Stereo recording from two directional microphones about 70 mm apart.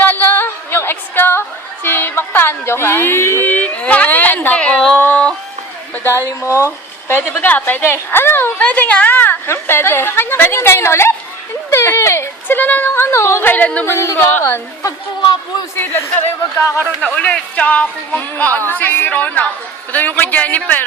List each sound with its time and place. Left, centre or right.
0.0 s female singing: left
3.5 s a sound: left
4.9 s a sound: left
5.9 s speech: left
6.5 s speech: right
7.1 s a woman's voice: left
8.5 s a woman's voice: left
17.0 s speech: centre